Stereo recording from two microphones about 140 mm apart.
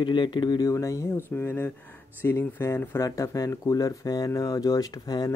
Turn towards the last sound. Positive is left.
turn(degrees=25)  # may be behind; listen again after turning